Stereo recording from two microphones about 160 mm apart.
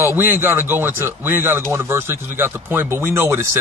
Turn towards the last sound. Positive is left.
turn(degrees=-15)  # may be behind; listen again after turning